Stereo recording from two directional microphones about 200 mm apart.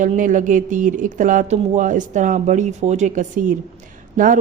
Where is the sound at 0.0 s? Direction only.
40° right (ahead or behind).